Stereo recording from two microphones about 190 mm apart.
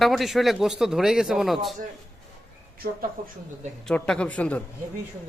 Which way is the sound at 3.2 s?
50° right (ahead or behind).